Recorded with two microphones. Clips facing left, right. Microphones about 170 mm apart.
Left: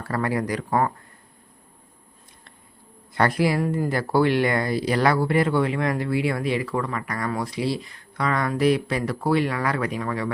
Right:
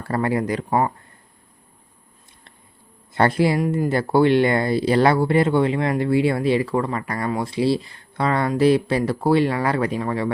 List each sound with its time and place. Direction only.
0.0 s speech: 25° right (ahead or behind)
3.2 s speech: 25° right (ahead or behind)